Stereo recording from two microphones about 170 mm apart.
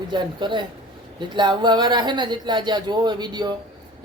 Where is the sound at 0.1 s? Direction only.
25° right (ahead or behind).